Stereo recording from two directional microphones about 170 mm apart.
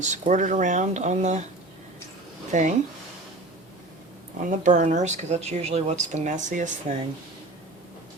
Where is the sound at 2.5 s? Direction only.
45° right (ahead or behind).